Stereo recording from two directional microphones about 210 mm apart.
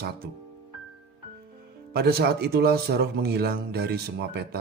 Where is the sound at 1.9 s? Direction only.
50° right (ahead or behind).